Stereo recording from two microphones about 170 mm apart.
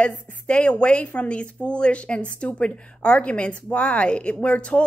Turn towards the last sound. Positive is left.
turn(degrees=5)  # may be behind; listen again after turning